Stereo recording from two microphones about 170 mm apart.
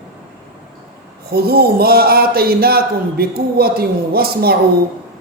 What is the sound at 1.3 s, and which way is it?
A man's voice, 65° right (ahead or behind).